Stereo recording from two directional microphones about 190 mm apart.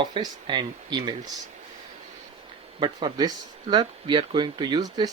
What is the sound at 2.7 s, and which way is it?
Speech, 25° right (ahead or behind).